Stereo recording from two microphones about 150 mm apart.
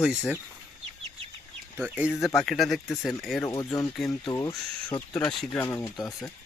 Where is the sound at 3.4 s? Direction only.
25° left (ahead or behind).